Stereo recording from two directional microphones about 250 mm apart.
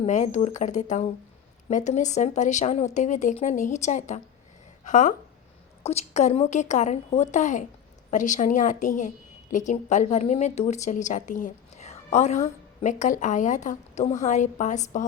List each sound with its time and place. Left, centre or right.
0.0 s a woman's voice: left